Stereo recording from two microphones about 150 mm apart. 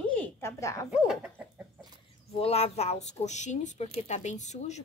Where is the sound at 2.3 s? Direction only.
40° left (ahead or behind).